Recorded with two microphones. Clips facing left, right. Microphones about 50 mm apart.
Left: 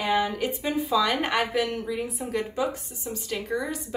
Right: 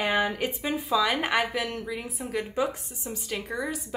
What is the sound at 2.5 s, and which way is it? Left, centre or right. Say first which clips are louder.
Speech: even; right.